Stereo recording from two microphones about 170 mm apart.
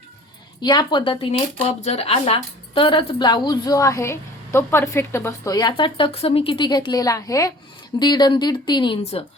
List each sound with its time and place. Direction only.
0.6 s speech: 25° left (ahead or behind)